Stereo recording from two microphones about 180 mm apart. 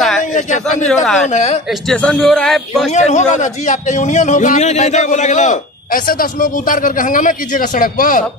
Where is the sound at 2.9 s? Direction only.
40° left (ahead or behind).